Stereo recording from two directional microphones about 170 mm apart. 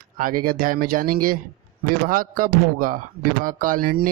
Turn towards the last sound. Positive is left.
turn(degrees=-55)  # may be behind; listen again after turning